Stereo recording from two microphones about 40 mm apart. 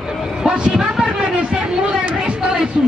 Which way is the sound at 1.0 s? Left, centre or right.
Right.